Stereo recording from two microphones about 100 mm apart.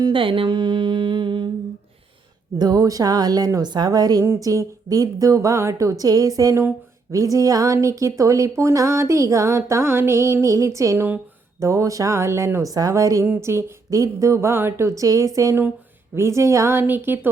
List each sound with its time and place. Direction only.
0.1 s humming: 60° right (ahead or behind)
2.6 s speech: 40° right (ahead or behind)
13.2 s speech: 20° right (ahead or behind)